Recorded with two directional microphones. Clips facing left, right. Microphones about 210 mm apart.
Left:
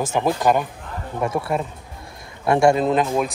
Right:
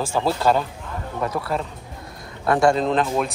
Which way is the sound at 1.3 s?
25° left (ahead or behind).